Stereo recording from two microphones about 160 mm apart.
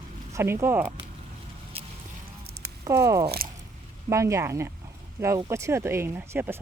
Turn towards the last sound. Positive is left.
turn(degrees=-15)  # may be behind; listen again after turning